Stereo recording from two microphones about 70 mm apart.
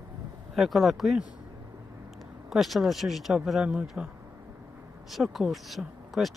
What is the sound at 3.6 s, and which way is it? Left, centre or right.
Speech, centre.